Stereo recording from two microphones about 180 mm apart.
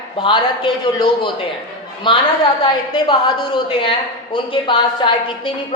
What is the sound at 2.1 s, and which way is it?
A woman's voice, 25° left (ahead or behind).